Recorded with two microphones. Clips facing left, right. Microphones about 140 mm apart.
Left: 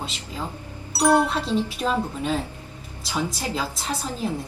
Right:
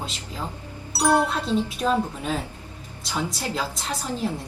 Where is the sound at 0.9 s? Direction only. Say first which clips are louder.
Left 2 dB; centre (ahead or behind).